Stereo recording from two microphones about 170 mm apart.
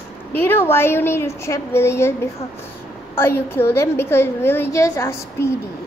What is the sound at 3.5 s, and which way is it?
Speech, 15° left (ahead or behind).